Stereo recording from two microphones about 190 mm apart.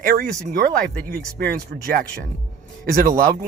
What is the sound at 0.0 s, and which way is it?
Speech, 50° right (ahead or behind).